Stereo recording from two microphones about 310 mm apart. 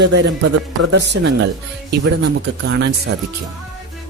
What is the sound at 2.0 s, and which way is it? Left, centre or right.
Speech, right.